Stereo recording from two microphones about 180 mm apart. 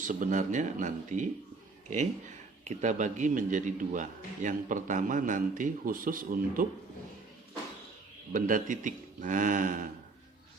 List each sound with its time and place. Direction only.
0.0 s a man's voice: 45° right (ahead or behind)
2.6 s a man's voice: 40° right (ahead or behind)
8.3 s a man's voice: 45° right (ahead or behind)